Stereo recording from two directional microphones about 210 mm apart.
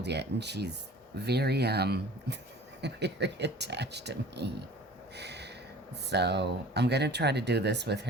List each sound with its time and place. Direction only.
0.0 s speech: 55° right (ahead or behind)
5.1 s a sound: 55° right (ahead or behind)
6.1 s speech: 55° right (ahead or behind)